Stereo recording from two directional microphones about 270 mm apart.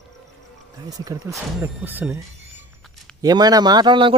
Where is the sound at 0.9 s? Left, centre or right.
Centre.